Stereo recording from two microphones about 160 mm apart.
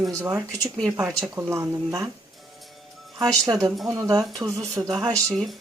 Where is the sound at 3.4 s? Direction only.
25° right (ahead or behind).